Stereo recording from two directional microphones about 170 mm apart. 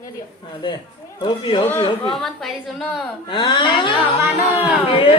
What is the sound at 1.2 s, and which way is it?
Speech, 30° left (ahead or behind).